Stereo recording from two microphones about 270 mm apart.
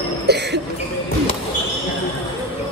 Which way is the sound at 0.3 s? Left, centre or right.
Right.